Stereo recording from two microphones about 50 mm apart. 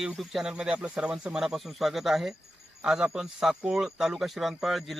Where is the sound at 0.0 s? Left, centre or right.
Centre.